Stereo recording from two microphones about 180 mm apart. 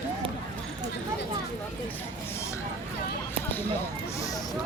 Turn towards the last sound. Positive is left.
turn(degrees=20)  # may be behind; listen again after turning